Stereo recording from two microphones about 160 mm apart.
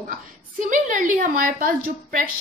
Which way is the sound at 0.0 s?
55° right (ahead or behind).